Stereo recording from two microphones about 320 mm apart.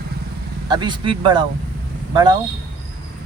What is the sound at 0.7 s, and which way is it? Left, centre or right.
Speech, centre.